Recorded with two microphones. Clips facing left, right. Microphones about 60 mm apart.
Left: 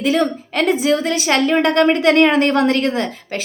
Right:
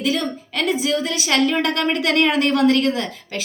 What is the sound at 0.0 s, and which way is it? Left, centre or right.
A woman's voice, left.